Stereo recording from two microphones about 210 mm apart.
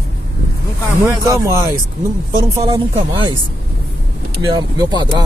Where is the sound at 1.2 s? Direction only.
15° right (ahead or behind).